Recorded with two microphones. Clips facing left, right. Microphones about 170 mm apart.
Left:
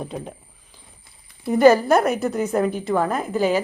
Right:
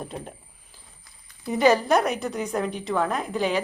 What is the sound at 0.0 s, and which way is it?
Speech, centre (ahead or behind).